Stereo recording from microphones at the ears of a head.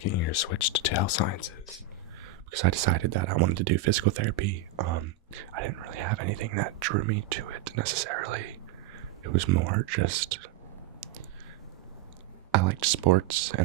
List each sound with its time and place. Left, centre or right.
0.0 s speech: left
2.5 s speech: right
12.5 s speech: right